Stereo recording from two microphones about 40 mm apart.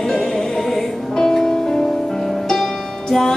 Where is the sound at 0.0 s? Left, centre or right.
Centre.